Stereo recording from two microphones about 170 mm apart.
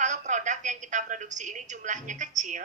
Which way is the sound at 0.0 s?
45° right (ahead or behind).